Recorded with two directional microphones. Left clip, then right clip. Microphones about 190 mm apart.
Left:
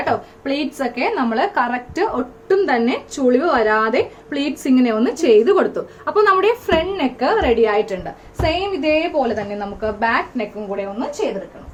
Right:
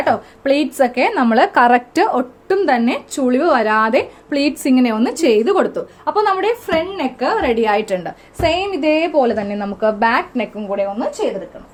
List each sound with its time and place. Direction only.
0.0 s a woman's voice: 55° right (ahead or behind); by 7.5 s 30° right (ahead or behind)
7.6 s a woman's voice: 50° right (ahead or behind)